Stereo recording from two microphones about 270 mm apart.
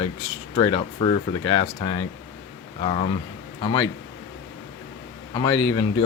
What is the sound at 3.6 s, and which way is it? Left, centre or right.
Speech, centre.